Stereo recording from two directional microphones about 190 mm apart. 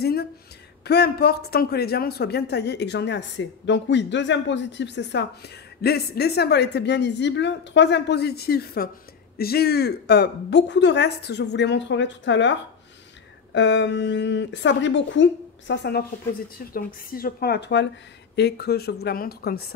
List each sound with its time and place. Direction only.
0.0 s a sound: 55° left (ahead or behind)
0.8 s a woman's voice: 60° left (ahead or behind)
5.8 s a woman's voice: 55° left (ahead or behind)
16.5 s a woman's voice: 50° left (ahead or behind)